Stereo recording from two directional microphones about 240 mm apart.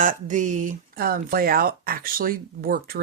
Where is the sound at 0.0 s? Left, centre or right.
Right.